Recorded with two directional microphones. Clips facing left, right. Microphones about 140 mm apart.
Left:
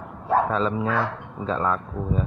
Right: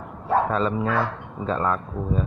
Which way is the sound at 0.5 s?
Centre (ahead or behind).